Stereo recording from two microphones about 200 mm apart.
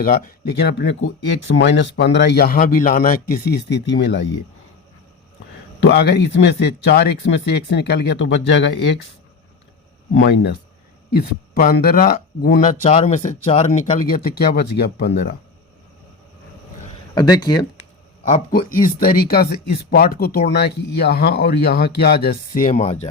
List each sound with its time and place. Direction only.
0.0 s speech: 55° left (ahead or behind)
5.8 s speech: 55° left (ahead or behind)
10.2 s speech: 60° left (ahead or behind)
12.8 s speech: 35° left (ahead or behind)
14.3 s speech: 50° left (ahead or behind)
17.2 s speech: 20° left (ahead or behind)
18.3 s speech: 45° left (ahead or behind)
22.7 s speech: 30° left (ahead or behind)